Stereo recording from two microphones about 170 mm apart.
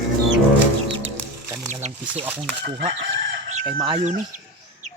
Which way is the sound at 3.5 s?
40° right (ahead or behind).